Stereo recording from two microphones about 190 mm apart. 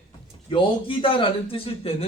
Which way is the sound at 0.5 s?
25° left (ahead or behind).